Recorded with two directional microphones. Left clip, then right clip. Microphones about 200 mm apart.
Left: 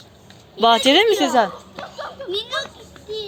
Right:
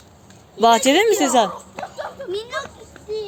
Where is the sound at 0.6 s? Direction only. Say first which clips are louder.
Even; 10° right (ahead or behind).